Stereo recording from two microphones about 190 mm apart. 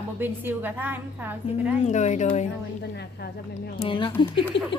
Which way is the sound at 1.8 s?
35° left (ahead or behind).